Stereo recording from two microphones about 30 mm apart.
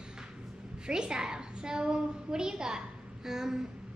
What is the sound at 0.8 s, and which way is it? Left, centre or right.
A child's voice, right.